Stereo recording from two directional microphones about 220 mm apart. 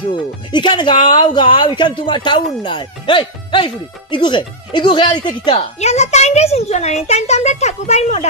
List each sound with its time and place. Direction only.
0.1 s speech: 20° left (ahead or behind)